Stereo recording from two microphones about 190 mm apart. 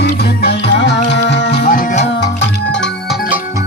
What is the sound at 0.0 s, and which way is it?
Music, 60° left (ahead or behind).